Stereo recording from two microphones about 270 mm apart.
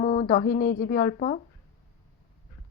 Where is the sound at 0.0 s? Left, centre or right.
Left.